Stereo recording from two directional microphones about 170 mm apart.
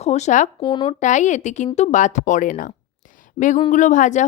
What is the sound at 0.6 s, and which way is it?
Speech, 25° left (ahead or behind).